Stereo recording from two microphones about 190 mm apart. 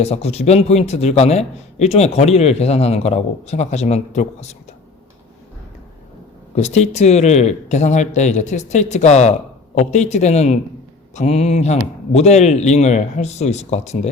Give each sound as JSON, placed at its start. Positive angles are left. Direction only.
{"t": 0.0, "sound": "a man's voice", "side_deg": 35}
{"t": 6.6, "sound": "a man's voice", "side_deg": 35}